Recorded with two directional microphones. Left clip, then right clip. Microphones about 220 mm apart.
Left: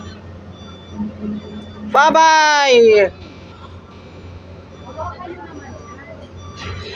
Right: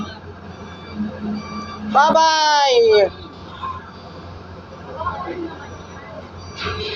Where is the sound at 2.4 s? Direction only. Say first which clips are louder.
Left 3 dB; 60° left (ahead or behind).